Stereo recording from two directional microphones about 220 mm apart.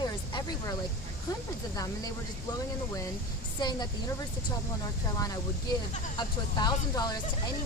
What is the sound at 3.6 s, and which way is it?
Speech, 20° left (ahead or behind).